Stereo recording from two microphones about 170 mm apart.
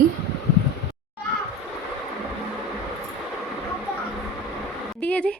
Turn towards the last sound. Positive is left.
turn(degrees=5)  # may be behind; listen again after turning